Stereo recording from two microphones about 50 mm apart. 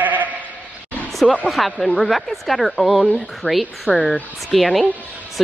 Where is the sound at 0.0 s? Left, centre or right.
Right.